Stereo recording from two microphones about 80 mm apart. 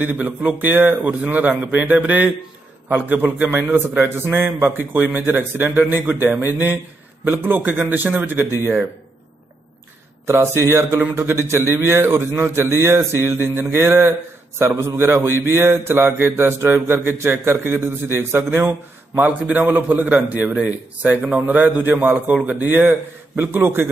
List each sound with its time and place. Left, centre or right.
0.0 s speech: right
10.2 s a man's voice: right
19.4 s a man's voice: centre
19.7 s speech: right